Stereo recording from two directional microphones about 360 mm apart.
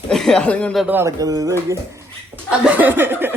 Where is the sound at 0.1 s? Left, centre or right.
Centre.